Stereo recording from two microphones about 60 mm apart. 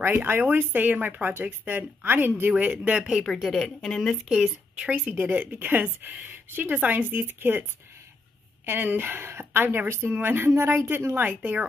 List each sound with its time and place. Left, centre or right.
0.0 s speech: right
2.5 s speech: right
3.5 s a woman's voice: centre
4.3 s speech: centre
4.9 s speech: right
8.6 s speech: right